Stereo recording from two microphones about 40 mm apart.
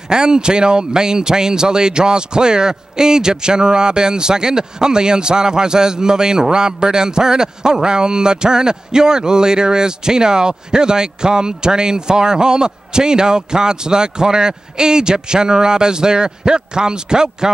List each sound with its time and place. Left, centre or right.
0.1 s speech: centre